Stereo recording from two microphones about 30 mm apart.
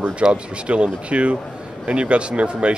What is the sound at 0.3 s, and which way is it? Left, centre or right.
Speech, right.